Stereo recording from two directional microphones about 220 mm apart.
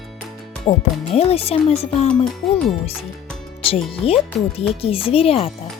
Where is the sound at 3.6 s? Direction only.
25° left (ahead or behind).